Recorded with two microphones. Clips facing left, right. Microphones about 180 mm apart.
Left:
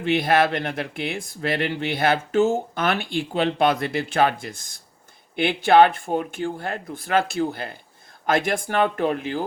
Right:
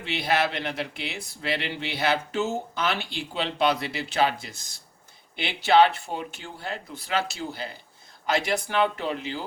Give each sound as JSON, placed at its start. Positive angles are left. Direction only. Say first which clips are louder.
{"t": 0.0, "sound": "speech", "louder": "left 6 dB", "side_deg": 50}